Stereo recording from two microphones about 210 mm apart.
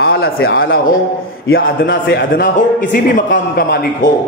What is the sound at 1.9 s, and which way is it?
Speech, 55° left (ahead or behind).